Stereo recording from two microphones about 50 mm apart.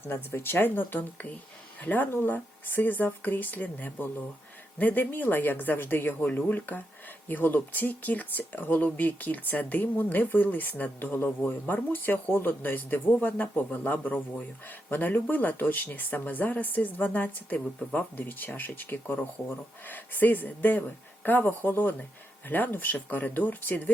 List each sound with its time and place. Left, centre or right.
0.0 s speech: left